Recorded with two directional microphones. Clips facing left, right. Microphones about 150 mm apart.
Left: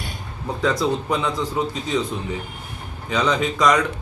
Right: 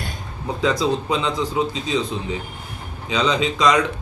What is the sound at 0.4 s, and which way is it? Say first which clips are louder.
A man's voice: right 1 dB; 15° right (ahead or behind).